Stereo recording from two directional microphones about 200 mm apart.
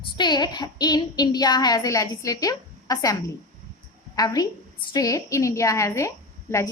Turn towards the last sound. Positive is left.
turn(degrees=15)  # may be behind; listen again after turning